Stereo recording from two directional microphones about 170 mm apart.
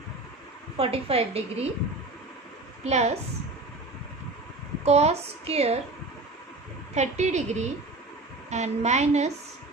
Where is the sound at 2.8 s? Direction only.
40° right (ahead or behind).